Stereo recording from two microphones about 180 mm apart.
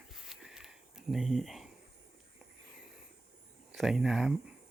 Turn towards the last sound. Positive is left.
turn(degrees=-5)  # may be behind; listen again after turning